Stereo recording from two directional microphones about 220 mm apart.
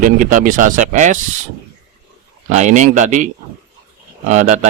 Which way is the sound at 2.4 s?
30° right (ahead or behind).